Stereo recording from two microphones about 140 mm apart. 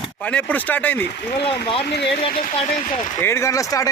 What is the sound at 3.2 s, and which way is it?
Speech, 20° left (ahead or behind).